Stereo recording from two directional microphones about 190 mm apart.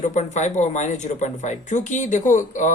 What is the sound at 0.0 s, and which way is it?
Speech, 40° left (ahead or behind).